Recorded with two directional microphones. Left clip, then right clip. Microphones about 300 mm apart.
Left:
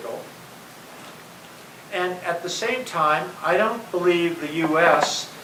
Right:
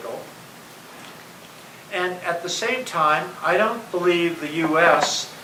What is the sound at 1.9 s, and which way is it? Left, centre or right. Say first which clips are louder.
Speech: right 1 dB; centre.